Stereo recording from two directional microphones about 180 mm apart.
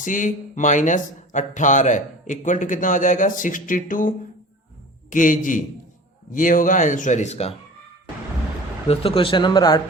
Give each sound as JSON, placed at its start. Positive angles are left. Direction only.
{"t": 0.0, "sound": "speech", "side_deg": 45}
{"t": 5.1, "sound": "speech", "side_deg": 45}
{"t": 8.9, "sound": "speech", "side_deg": 30}